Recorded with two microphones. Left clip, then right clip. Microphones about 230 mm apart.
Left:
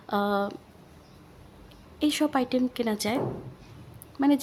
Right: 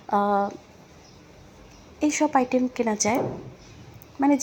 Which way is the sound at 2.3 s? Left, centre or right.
Centre.